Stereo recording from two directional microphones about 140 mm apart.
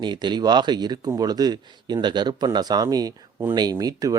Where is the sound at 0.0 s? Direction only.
30° right (ahead or behind).